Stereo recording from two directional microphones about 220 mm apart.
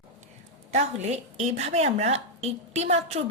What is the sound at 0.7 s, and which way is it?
A woman's voice, 30° right (ahead or behind).